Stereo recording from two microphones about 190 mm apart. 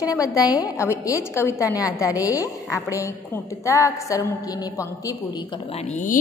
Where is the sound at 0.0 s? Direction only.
15° left (ahead or behind).